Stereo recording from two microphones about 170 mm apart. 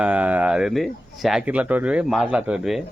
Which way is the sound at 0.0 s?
10° right (ahead or behind).